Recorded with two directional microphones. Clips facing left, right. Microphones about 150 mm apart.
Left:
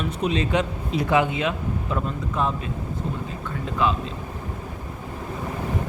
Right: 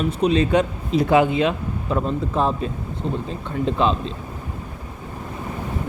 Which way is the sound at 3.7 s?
30° right (ahead or behind).